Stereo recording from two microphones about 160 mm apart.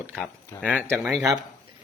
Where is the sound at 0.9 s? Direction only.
5° right (ahead or behind).